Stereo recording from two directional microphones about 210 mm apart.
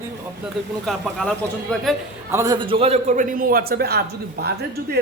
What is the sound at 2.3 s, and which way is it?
A man's voice, 15° right (ahead or behind).